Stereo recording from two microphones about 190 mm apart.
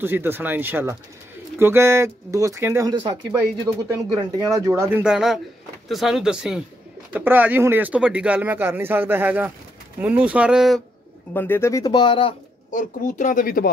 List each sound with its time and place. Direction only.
0.0 s speech: 10° right (ahead or behind)
5.0 s speech: 5° right (ahead or behind)
11.3 s speech: 10° left (ahead or behind); by 12.4 s 25° left (ahead or behind)
12.7 s speech: 40° left (ahead or behind)